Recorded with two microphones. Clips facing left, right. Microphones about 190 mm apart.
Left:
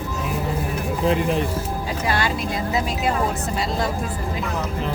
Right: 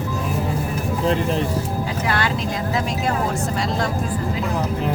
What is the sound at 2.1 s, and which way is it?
Vehicle, 15° left (ahead or behind).